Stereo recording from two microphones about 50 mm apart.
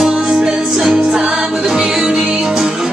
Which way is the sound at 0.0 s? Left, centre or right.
Centre.